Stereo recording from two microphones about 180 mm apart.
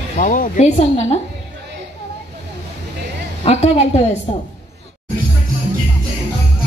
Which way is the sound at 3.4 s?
35° left (ahead or behind).